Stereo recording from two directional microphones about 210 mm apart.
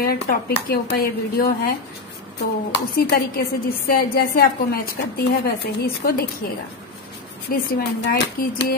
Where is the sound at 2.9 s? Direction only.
50° left (ahead or behind).